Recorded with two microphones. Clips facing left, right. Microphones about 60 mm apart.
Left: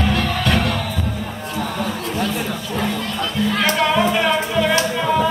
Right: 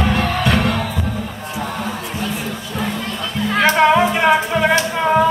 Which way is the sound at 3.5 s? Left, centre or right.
Right.